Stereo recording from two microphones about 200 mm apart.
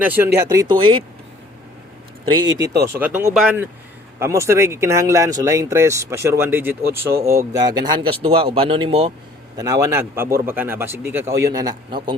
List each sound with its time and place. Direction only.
0.0 s a man's voice: 10° right (ahead or behind); by 1.0 s 25° right (ahead or behind)
2.6 s a man's voice: 10° right (ahead or behind); by 9.1 s 30° right (ahead or behind)
9.6 s speech: 15° right (ahead or behind)